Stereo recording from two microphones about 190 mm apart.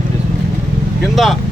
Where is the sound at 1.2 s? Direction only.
Centre (ahead or behind).